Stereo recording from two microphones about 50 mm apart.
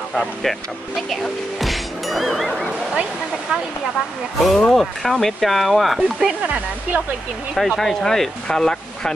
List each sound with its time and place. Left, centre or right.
0.1 s speech: centre
4.4 s speech: centre
6.1 s speech: right
7.5 s speech: centre